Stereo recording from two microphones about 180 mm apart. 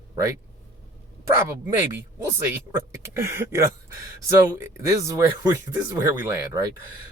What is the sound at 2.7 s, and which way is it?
Speech, 15° right (ahead or behind).